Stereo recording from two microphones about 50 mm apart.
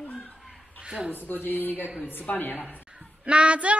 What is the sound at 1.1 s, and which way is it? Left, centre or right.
Speech, left.